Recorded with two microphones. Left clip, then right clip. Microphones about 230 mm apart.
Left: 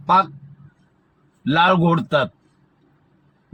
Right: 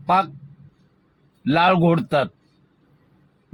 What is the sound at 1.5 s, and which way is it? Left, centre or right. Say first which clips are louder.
Speech: left 1 dB; left.